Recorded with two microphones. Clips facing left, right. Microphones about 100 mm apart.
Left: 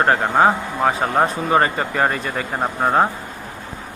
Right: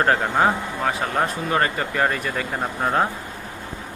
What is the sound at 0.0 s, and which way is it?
Speech, 15° left (ahead or behind).